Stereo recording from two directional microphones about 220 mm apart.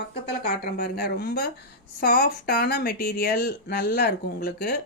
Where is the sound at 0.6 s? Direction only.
45° left (ahead or behind).